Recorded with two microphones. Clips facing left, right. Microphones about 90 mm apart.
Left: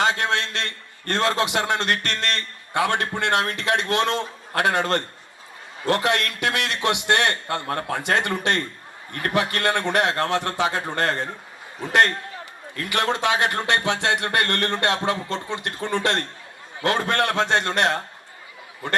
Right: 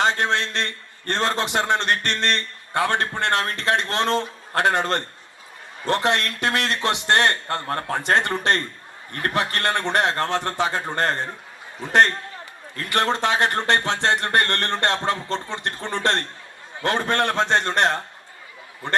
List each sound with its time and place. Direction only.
0.0 s a man's voice: 35° right (ahead or behind)
12.7 s a man's voice: 35° right (ahead or behind)